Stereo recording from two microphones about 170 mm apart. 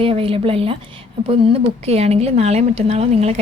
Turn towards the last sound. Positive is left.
turn(degrees=-35)  # may be behind; listen again after turning